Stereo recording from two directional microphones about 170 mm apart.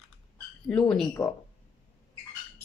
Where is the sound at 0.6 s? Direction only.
5° left (ahead or behind).